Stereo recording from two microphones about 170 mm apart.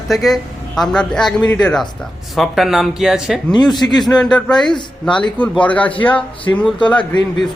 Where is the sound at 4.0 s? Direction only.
5° left (ahead or behind).